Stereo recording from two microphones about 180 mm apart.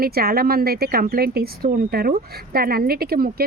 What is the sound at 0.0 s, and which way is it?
Speech, 60° right (ahead or behind).